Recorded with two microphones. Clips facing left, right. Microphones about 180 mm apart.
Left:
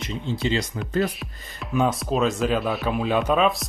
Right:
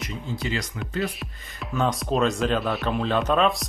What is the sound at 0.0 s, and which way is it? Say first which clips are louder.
Speech: left 4 dB; 25° left (ahead or behind).